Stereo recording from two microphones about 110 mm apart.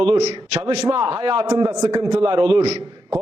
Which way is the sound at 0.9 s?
50° right (ahead or behind).